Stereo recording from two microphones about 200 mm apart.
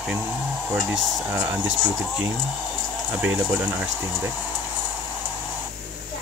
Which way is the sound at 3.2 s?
10° right (ahead or behind).